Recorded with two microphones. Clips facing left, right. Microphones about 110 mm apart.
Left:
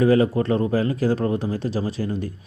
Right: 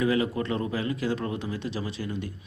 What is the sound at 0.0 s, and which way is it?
Speech, 40° left (ahead or behind).